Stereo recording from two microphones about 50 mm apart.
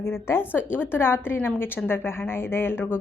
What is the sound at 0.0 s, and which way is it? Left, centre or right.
Speech, left.